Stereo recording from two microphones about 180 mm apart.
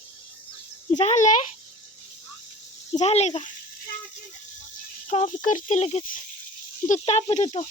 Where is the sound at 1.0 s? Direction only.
40° left (ahead or behind).